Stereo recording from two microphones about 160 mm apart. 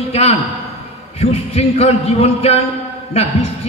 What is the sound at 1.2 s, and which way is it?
A man's voice, 40° left (ahead or behind).